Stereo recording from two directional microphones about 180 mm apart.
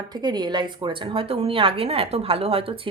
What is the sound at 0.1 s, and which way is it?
Speech, 25° right (ahead or behind).